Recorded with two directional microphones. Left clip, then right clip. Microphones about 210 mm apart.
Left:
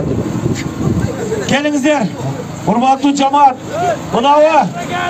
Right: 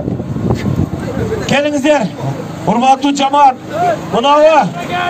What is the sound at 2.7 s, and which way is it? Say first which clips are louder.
Speech: right 1 dB; 35° right (ahead or behind).